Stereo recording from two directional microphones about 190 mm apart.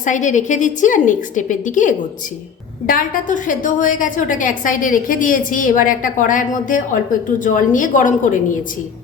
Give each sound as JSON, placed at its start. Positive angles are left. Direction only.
{"t": 0.0, "sound": "a woman's voice", "side_deg": 40}